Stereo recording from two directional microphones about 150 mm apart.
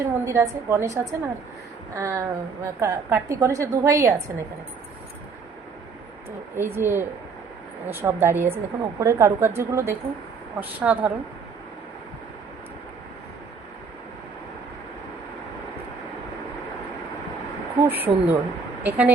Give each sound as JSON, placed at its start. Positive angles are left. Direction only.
{"t": 0.0, "sound": "a woman's voice", "side_deg": -20}
{"t": 6.6, "sound": "a woman's voice", "side_deg": -15}
{"t": 17.7, "sound": "speech", "side_deg": -15}